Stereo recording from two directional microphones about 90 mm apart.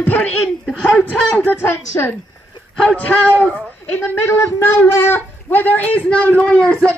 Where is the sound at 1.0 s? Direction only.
15° left (ahead or behind).